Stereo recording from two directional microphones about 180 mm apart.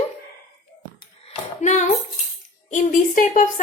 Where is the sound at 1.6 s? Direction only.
40° left (ahead or behind).